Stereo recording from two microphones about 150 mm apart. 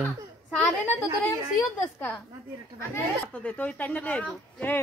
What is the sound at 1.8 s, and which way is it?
Speech, 10° left (ahead or behind).